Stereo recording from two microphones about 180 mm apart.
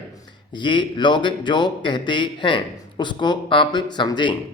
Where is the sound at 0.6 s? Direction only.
25° left (ahead or behind).